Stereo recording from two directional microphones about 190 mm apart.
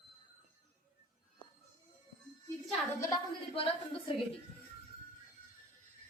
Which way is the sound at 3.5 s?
30° left (ahead or behind).